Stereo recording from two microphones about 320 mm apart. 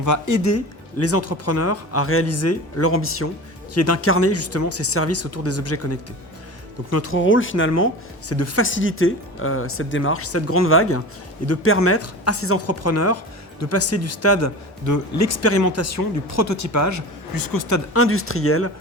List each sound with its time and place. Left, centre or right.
0.0 s speech: left
8.3 s speech: left
17.9 s speech: left